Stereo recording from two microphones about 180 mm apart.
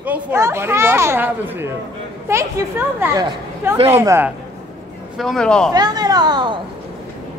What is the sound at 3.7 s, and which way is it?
Speech, 35° right (ahead or behind).